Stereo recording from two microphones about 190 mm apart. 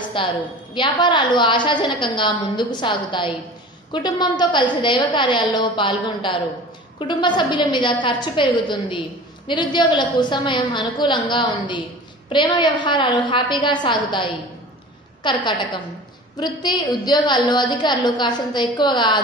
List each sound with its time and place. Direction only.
0.1 s a woman's voice: 25° left (ahead or behind)
16.3 s a woman's voice: 20° left (ahead or behind)